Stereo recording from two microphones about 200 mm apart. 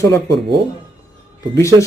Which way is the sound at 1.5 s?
15° left (ahead or behind).